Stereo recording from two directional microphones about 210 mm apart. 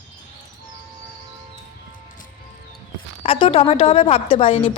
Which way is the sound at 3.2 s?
25° left (ahead or behind).